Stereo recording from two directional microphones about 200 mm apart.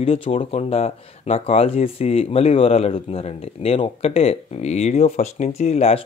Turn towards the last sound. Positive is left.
turn(degrees=30)  # may be behind; listen again after turning